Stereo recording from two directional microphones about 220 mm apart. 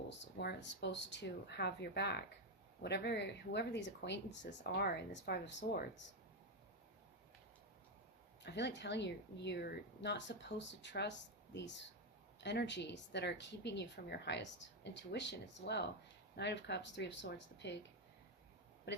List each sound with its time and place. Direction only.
0.1 s speech: 50° left (ahead or behind)
8.4 s speech: 50° left (ahead or behind)